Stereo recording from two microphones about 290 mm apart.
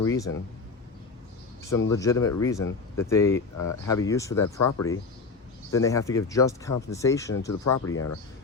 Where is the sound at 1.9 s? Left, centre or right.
Centre.